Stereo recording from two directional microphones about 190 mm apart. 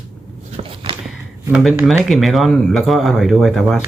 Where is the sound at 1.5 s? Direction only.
Centre (ahead or behind).